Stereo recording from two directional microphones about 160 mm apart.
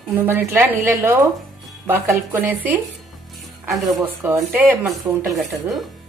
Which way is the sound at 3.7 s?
Centre (ahead or behind).